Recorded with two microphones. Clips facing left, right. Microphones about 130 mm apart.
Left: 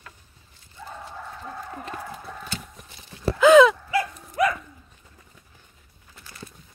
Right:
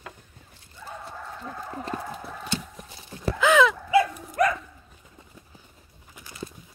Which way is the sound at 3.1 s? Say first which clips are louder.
Right 4 dB; 35° right (ahead or behind).